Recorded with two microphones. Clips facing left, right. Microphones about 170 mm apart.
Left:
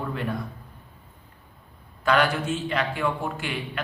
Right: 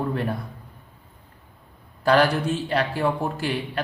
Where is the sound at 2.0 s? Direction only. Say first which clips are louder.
Right 3 dB; 35° right (ahead or behind).